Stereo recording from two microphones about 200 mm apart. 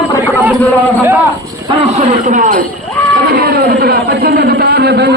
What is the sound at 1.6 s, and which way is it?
A man's voice, 30° right (ahead or behind).